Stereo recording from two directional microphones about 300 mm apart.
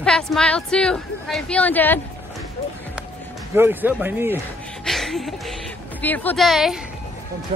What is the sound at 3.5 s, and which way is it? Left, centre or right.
A man's voice, centre.